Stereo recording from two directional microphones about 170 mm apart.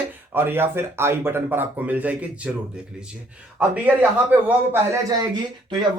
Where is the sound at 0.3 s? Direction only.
10° right (ahead or behind).